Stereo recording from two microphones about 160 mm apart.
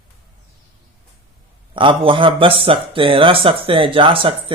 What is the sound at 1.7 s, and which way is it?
Speech, 30° right (ahead or behind).